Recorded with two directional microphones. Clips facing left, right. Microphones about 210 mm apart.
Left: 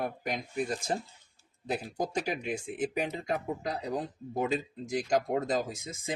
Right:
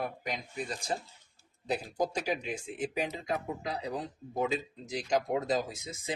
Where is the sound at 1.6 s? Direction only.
50° left (ahead or behind).